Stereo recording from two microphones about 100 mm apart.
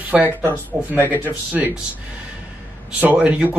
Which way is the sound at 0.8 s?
20° left (ahead or behind).